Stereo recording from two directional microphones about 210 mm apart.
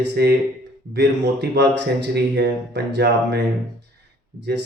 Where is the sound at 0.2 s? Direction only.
50° right (ahead or behind).